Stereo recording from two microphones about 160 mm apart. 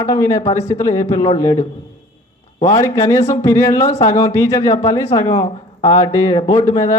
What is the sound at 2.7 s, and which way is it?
Speech, 20° left (ahead or behind).